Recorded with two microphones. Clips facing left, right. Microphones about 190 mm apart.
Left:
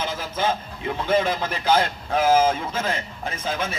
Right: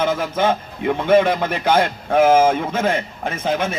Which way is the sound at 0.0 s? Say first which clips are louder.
Right 7 dB; 55° right (ahead or behind).